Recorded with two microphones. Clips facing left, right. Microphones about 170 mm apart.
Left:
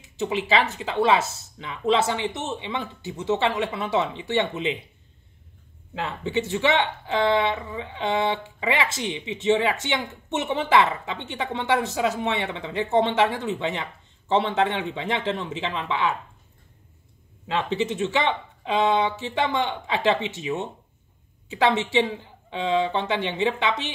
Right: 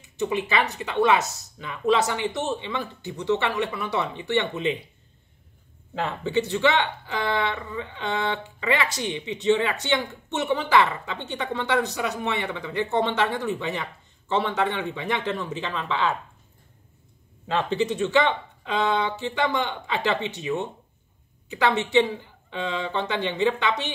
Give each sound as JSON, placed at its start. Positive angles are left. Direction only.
{"t": 0.2, "sound": "speech", "side_deg": 25}
{"t": 6.2, "sound": "speech", "side_deg": 20}
{"t": 17.5, "sound": "speech", "side_deg": 20}